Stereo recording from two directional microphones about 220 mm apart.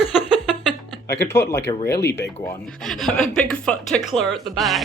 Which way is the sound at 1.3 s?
10° left (ahead or behind).